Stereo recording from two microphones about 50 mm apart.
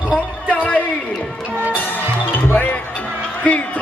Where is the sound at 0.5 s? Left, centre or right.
Left.